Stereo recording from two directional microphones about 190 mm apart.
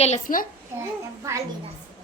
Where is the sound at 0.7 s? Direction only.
15° right (ahead or behind).